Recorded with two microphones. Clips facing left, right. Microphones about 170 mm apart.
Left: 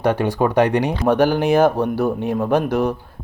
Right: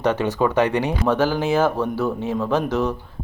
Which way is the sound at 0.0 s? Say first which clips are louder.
Left 2 dB; 10° left (ahead or behind).